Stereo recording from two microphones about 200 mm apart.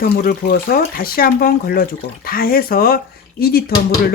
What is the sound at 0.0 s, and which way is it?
Speech, 50° left (ahead or behind).